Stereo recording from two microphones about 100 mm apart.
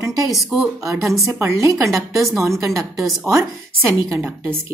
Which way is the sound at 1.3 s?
25° right (ahead or behind).